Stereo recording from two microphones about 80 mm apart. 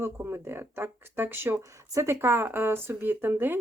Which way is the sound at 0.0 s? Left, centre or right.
Right.